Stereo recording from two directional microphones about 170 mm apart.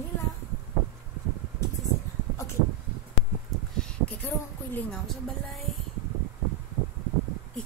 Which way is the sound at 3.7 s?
5° left (ahead or behind).